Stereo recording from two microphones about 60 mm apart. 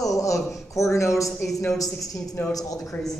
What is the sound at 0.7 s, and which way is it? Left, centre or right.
Speech, left.